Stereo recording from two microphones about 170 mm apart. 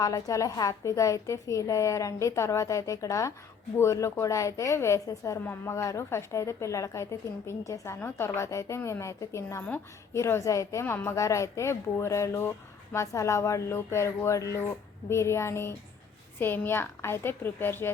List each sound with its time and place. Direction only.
0.0 s a woman's voice: 20° left (ahead or behind)